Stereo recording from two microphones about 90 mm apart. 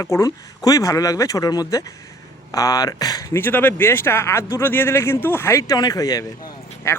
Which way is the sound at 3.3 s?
20° left (ahead or behind).